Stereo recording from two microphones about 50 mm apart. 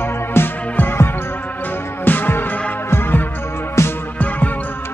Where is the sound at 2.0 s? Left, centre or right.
Left.